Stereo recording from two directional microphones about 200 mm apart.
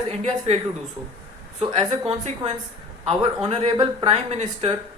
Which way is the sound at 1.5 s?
30° right (ahead or behind).